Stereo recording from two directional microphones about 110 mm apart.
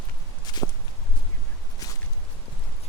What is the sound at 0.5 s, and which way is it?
Walk, 40° left (ahead or behind).